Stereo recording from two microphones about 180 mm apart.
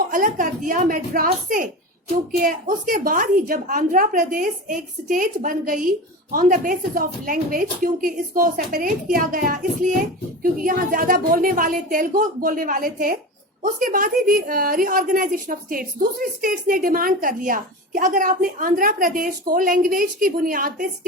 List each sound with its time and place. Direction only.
0.1 s a woman's voice: 50° right (ahead or behind)